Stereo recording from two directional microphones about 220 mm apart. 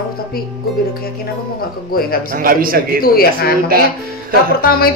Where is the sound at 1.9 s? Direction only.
45° left (ahead or behind).